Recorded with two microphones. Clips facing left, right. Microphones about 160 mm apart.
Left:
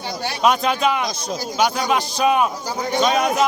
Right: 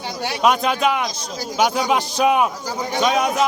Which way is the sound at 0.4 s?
10° right (ahead or behind).